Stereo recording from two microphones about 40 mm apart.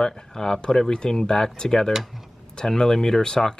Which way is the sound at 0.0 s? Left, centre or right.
Centre.